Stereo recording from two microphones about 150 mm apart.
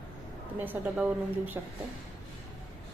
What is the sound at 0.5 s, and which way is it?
A woman's voice, 10° right (ahead or behind).